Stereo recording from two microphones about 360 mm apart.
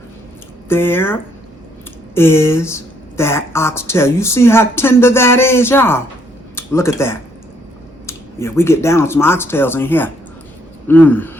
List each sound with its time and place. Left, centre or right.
0.7 s speech: centre